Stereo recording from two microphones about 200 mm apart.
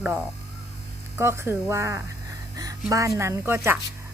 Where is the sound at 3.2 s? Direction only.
15° right (ahead or behind).